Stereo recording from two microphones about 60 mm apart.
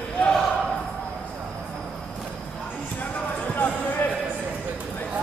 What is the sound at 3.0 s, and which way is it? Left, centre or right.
Basketball bounce, left.